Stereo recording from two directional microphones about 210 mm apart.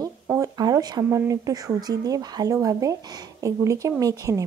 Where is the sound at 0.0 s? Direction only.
15° right (ahead or behind).